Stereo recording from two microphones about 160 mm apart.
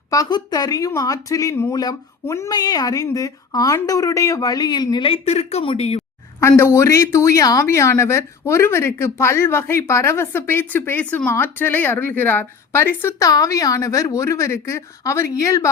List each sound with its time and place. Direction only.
0.1 s speech: 25° left (ahead or behind); by 6.0 s 40° left (ahead or behind)
6.4 s speech: 15° left (ahead or behind)